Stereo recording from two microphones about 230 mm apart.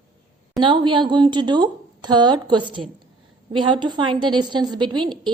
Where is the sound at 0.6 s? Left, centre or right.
Right.